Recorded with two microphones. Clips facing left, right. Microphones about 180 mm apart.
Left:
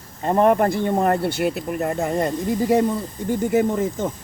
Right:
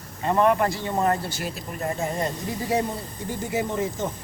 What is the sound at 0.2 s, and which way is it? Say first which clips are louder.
Speech: left 4 dB; 45° left (ahead or behind).